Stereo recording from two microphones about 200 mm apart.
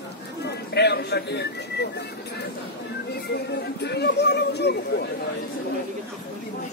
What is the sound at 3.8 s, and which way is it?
Speech, 55° left (ahead or behind).